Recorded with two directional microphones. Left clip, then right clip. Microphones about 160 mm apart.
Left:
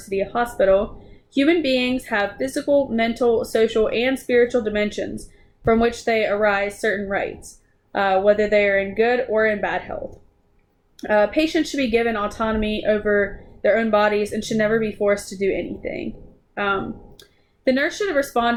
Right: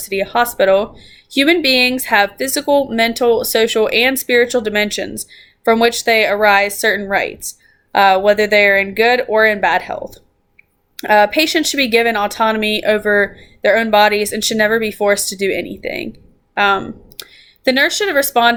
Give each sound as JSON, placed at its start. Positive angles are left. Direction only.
{"t": 0.1, "sound": "speech", "side_deg": -15}